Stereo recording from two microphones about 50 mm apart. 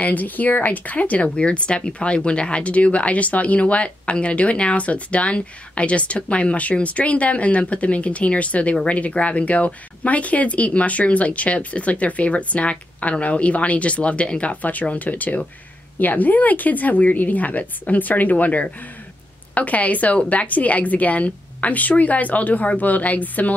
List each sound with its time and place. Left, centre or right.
0.0 s a woman's voice: left